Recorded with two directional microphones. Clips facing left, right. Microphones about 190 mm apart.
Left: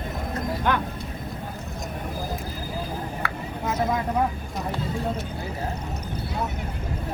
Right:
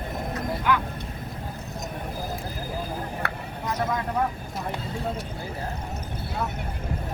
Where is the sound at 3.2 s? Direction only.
60° right (ahead or behind).